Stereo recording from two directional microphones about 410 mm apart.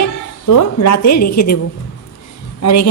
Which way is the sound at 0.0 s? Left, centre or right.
Left.